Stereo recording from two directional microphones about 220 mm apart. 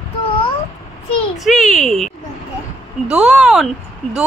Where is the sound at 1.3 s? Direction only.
Centre (ahead or behind).